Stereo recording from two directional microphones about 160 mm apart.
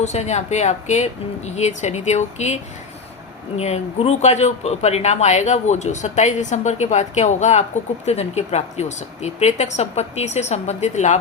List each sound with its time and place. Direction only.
0.0 s speech: 45° left (ahead or behind)
3.6 s speech: 45° left (ahead or behind)